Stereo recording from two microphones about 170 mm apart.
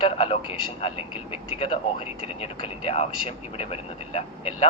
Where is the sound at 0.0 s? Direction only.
35° left (ahead or behind).